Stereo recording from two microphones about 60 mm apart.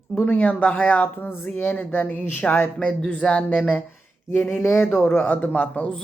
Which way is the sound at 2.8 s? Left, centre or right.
Centre.